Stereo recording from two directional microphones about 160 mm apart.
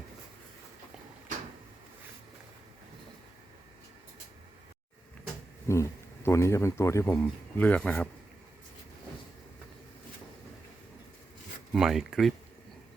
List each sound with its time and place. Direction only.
5.6 s speech: 20° left (ahead or behind)
11.7 s speech: centre (ahead or behind)